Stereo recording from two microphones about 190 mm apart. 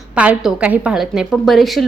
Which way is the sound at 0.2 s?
5° right (ahead or behind).